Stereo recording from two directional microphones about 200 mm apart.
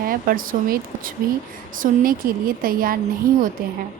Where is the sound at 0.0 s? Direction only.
45° right (ahead or behind).